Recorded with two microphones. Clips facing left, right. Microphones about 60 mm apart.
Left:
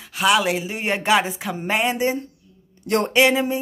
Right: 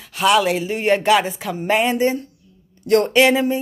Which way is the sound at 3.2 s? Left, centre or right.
Centre.